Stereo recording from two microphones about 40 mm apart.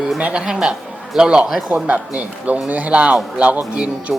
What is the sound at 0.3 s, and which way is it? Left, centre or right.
A man's voice, centre.